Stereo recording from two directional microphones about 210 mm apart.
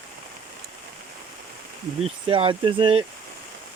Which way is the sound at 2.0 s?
25° right (ahead or behind).